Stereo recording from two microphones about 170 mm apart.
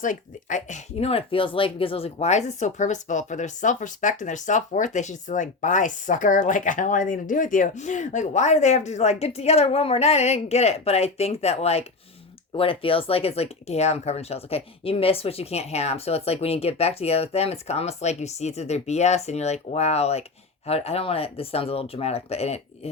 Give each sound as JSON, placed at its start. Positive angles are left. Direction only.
{"t": 0.0, "sound": "speech", "side_deg": 50}